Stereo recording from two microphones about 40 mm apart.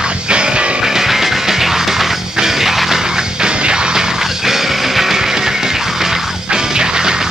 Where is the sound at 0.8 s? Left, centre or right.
Centre.